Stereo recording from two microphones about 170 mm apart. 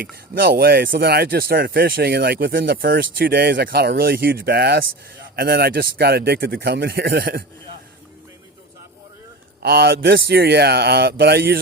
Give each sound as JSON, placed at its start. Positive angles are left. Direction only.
{"t": 0.0, "sound": "speech", "side_deg": -60}
{"t": 9.6, "sound": "speech", "side_deg": -70}